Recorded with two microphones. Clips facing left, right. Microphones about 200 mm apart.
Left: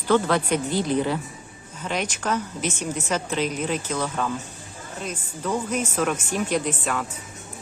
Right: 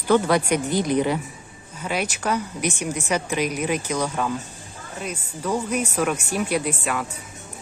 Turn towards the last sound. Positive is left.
turn(degrees=-10)  # may be behind; listen again after turning